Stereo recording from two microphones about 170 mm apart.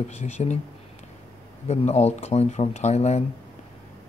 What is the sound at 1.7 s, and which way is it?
Speech, 40° left (ahead or behind).